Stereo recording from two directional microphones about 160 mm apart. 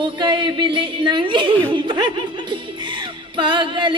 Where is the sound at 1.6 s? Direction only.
30° right (ahead or behind).